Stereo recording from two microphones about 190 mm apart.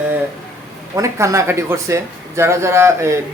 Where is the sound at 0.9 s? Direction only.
15° right (ahead or behind).